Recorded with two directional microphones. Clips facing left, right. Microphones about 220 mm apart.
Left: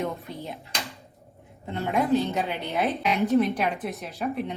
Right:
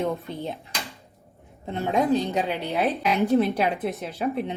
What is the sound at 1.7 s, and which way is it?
A woman's voice, 15° right (ahead or behind).